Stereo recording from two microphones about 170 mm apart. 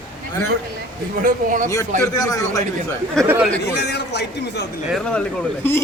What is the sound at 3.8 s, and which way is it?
Speech, 80° left.